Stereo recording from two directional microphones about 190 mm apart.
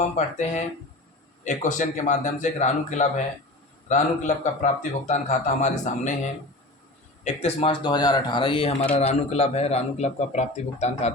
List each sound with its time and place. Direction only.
0.2 s speech: 40° left (ahead or behind)
1.5 s speech: 40° left (ahead or behind)
7.4 s speech: 30° left (ahead or behind)